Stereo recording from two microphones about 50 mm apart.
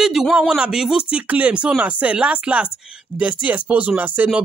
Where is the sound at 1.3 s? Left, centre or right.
Right.